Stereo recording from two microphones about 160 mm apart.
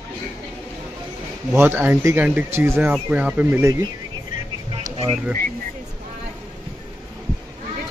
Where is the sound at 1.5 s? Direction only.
15° right (ahead or behind).